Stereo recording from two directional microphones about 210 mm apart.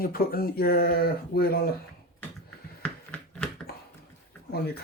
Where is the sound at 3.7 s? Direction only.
50° left (ahead or behind).